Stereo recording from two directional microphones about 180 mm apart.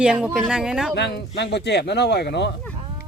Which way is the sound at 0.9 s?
70° left (ahead or behind).